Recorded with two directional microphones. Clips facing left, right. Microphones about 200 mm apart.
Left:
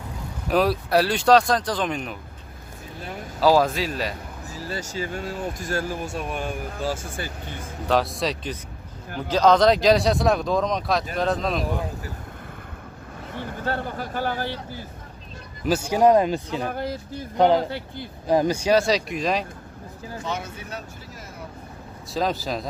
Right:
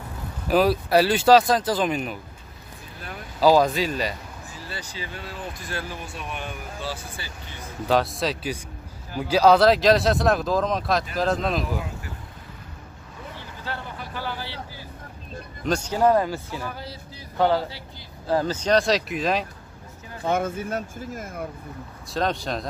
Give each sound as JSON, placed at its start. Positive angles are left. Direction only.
{"t": 0.5, "sound": "speech", "side_deg": 0}
{"t": 3.3, "sound": "speech", "side_deg": 0}
{"t": 4.6, "sound": "speech", "side_deg": 45}
{"t": 7.9, "sound": "speech", "side_deg": 0}
{"t": 13.3, "sound": "speech", "side_deg": 55}
{"t": 15.6, "sound": "speech", "side_deg": 10}
{"t": 16.7, "sound": "speech", "side_deg": 50}
{"t": 17.4, "sound": "speech", "side_deg": 20}
{"t": 17.6, "sound": "speech", "side_deg": 55}
{"t": 18.2, "sound": "speech", "side_deg": 15}
{"t": 20.2, "sound": "speech", "side_deg": -50}
{"t": 22.1, "sound": "speech", "side_deg": 0}